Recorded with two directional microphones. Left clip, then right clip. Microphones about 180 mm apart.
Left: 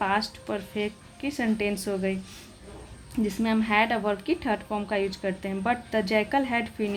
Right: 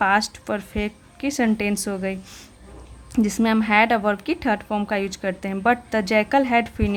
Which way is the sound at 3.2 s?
35° right (ahead or behind).